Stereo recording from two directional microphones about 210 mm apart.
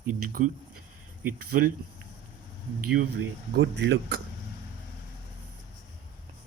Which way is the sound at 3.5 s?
55° right (ahead or behind).